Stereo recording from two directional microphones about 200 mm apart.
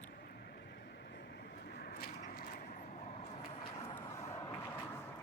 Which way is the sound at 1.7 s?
50° left (ahead or behind).